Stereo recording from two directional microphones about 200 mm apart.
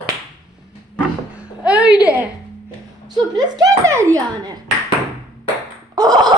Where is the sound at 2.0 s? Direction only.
10° right (ahead or behind).